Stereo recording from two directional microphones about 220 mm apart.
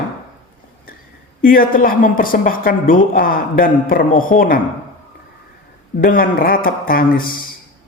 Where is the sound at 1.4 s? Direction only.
40° left (ahead or behind).